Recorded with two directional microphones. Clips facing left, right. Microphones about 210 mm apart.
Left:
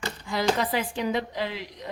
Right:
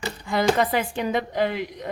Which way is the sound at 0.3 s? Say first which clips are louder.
Right 4 dB; 55° right (ahead or behind).